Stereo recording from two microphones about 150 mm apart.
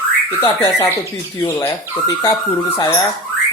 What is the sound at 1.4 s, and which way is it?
Speech, 20° left (ahead or behind).